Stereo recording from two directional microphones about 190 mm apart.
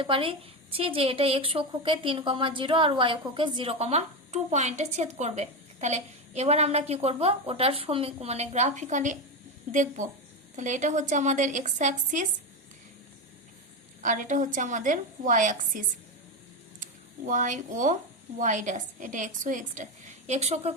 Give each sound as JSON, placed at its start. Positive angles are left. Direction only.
{"t": 0.0, "sound": "a woman's voice", "side_deg": -25}
{"t": 14.0, "sound": "a woman's voice", "side_deg": -45}
{"t": 16.8, "sound": "a woman's voice", "side_deg": -40}